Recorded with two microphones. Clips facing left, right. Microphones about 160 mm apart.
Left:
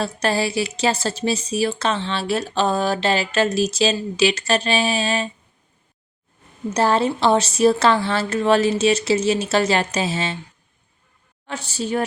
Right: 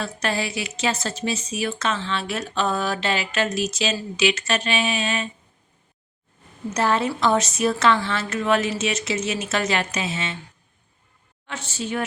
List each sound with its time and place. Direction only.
0.0 s a woman's voice: 35° left (ahead or behind)
6.7 s a woman's voice: 30° left (ahead or behind)
11.4 s a woman's voice: 35° left (ahead or behind)